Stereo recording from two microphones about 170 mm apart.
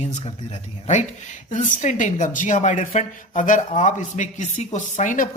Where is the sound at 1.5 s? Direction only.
45° left (ahead or behind).